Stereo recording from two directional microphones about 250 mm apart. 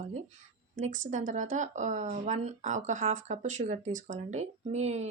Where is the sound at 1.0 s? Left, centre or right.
Right.